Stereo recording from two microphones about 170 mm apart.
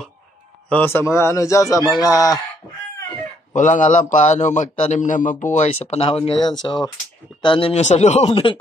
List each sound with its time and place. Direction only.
0.7 s a man's voice: 10° left (ahead or behind)
3.5 s a man's voice: 45° left (ahead or behind)
8.3 s speech: 30° left (ahead or behind)